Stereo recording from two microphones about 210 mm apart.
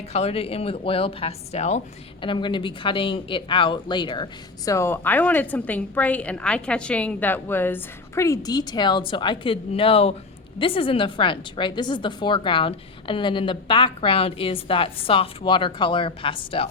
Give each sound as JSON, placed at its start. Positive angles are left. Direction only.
{"t": 0.1, "sound": "a woman's voice", "side_deg": 30}